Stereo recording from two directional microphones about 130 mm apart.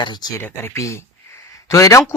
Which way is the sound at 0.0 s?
30° left (ahead or behind).